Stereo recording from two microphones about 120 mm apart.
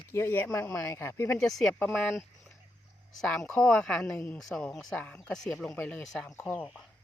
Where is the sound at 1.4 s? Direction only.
5° left (ahead or behind).